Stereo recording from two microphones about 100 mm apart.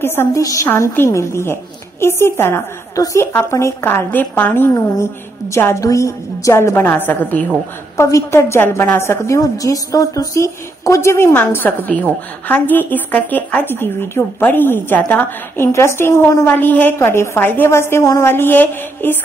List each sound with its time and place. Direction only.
0.0 s a woman's voice: 20° left (ahead or behind)
0.4 s a woman's voice: 35° left (ahead or behind); by 7.4 s 15° left (ahead or behind)
8.0 s a woman's voice: 30° left (ahead or behind)